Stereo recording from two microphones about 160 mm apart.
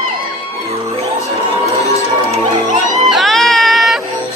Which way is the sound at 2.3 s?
50° right (ahead or behind).